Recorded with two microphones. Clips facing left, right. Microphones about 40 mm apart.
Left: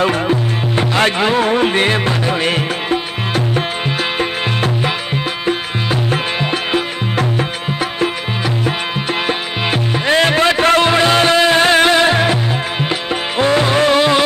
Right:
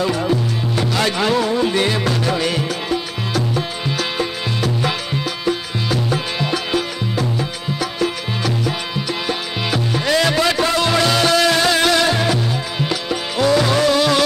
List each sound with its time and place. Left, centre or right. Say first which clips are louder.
0.0 s music: left 3 dB; left
1.5 s music: left 4 dB; left
9.3 s music: left 3 dB; left